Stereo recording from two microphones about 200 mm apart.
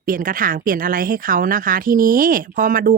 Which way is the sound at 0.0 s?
45° right (ahead or behind).